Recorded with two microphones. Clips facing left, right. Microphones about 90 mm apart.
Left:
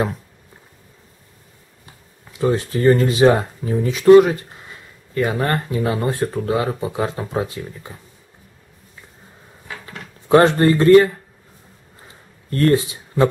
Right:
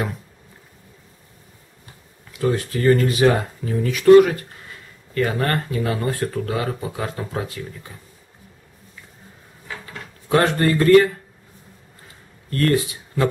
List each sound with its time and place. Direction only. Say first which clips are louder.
2.3 s speech: left 2 dB; 25° left (ahead or behind)
10.2 s a sound: left 6 dB; 25° left (ahead or behind)
10.6 s speech: left 3 dB; 25° left (ahead or behind)
12.4 s speech: left 3 dB; 25° left (ahead or behind)